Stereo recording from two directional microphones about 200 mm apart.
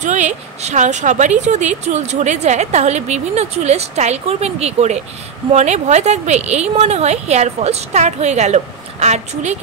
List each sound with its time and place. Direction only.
0.0 s speech: 35° right (ahead or behind)